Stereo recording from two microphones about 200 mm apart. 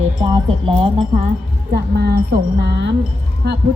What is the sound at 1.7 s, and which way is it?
A woman's voice, 55° right (ahead or behind).